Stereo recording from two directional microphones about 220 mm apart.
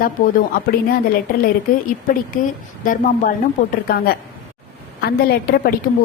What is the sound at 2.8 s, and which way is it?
A woman's voice, 40° left (ahead or behind).